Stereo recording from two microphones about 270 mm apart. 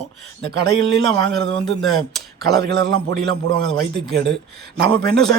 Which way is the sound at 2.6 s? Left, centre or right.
Right.